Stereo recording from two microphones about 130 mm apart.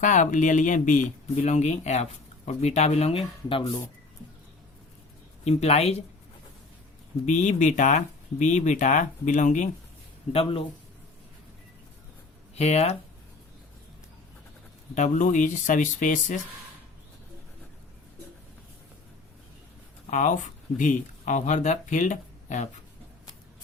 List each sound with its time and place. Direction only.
0.0 s speech: 75° left (ahead or behind); by 3.6 s 45° left (ahead or behind)
5.5 s speech: 55° left (ahead or behind)
7.3 s speech: 70° left (ahead or behind)
10.3 s speech: 45° left (ahead or behind)
12.5 s speech: 55° left (ahead or behind)
14.9 s speech: 70° left (ahead or behind)
20.1 s speech: 75° left (ahead or behind)